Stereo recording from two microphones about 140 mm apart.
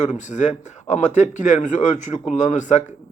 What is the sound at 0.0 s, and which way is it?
Speech, 60° left (ahead or behind).